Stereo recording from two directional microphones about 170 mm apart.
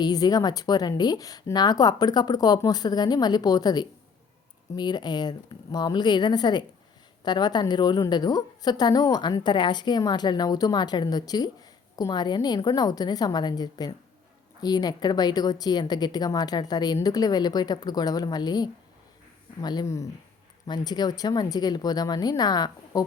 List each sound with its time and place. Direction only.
0.0 s a woman's voice: 25° left (ahead or behind)